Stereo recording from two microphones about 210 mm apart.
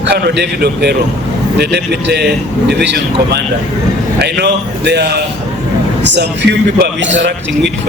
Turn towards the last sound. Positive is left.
turn(degrees=-60)  # may be behind; listen again after turning